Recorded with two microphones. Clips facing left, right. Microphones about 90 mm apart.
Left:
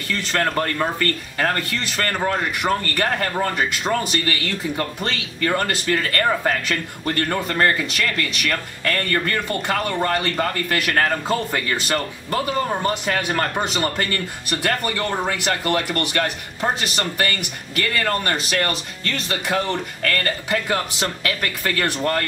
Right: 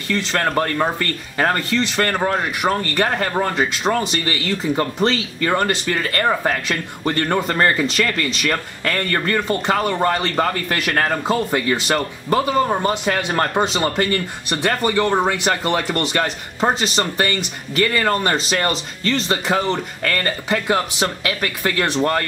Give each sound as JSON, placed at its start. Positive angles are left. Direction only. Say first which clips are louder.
{"t": 0.1, "sound": "speech", "louder": "right 3 dB", "side_deg": -20}